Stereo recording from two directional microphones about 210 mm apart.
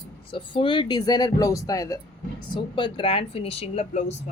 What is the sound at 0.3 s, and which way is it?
Speech, 25° left (ahead or behind).